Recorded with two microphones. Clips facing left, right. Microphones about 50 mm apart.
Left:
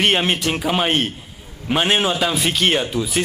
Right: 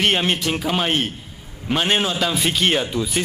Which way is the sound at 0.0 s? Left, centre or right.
Centre.